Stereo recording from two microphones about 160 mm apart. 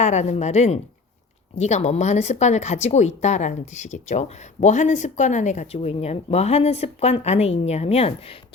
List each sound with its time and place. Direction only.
0.0 s a woman's voice: 45° left (ahead or behind)